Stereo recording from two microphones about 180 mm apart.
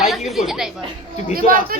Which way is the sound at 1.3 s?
50° right (ahead or behind).